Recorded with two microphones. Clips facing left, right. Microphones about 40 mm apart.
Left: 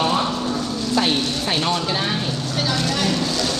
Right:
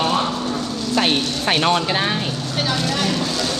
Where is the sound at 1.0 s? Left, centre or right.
Right.